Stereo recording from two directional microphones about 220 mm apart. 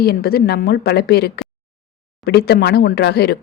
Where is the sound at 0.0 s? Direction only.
45° left (ahead or behind).